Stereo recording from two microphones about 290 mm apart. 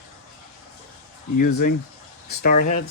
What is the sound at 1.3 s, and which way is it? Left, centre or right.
Speech, left.